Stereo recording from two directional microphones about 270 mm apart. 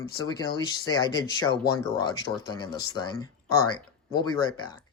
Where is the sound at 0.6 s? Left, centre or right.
Centre.